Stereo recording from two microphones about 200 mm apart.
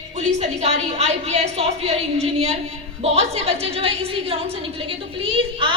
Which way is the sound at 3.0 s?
30° right (ahead or behind).